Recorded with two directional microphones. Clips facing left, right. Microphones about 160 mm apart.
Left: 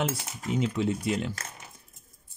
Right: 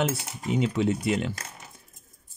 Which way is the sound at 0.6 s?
70° right (ahead or behind).